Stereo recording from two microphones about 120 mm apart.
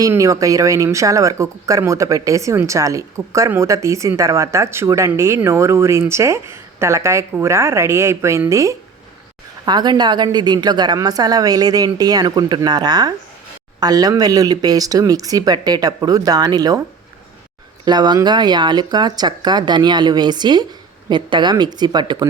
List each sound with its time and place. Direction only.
0.1 s speech: 25° right (ahead or behind)
9.6 s speech: 35° right (ahead or behind)
17.8 s speech: 35° right (ahead or behind)